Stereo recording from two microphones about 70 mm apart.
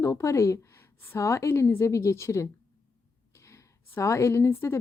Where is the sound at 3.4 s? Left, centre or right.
Left.